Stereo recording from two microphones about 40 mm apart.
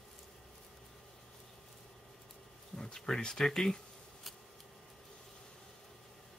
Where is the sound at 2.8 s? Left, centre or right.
Centre.